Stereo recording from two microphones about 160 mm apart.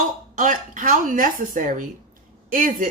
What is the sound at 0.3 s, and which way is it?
Speech, 55° right (ahead or behind).